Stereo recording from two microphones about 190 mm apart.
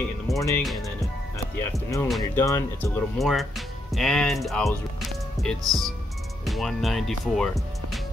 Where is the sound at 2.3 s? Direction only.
15° left (ahead or behind).